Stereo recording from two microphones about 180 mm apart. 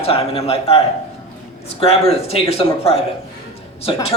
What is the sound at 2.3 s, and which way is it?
Speech, 35° left (ahead or behind).